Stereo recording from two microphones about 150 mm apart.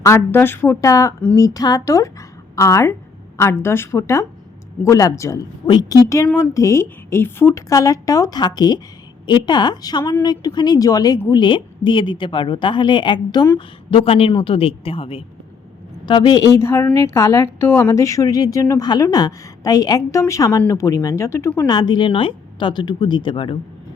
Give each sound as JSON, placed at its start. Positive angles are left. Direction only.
{"t": 0.0, "sound": "a woman's voice", "side_deg": 15}
{"t": 13.9, "sound": "a woman's voice", "side_deg": 40}
{"t": 21.7, "sound": "a woman's voice", "side_deg": 30}